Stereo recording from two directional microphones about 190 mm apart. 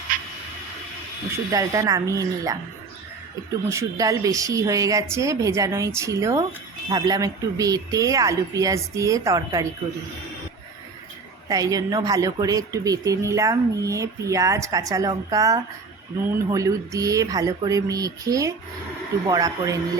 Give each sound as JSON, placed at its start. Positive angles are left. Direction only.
{"t": 1.5, "sound": "speech", "side_deg": -15}
{"t": 3.7, "sound": "speech", "side_deg": -15}
{"t": 11.4, "sound": "speech", "side_deg": -20}